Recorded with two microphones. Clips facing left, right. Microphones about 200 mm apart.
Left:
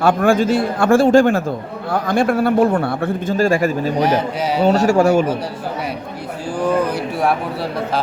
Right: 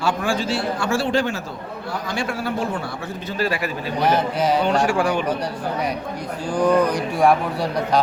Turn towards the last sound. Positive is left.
turn(degrees=5)  # may be behind; listen again after turning